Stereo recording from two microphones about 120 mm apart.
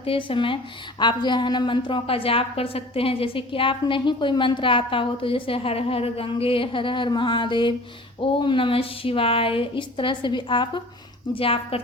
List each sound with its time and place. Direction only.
0.0 s a woman's voice: 50° left (ahead or behind)
11.3 s a woman's voice: 50° left (ahead or behind)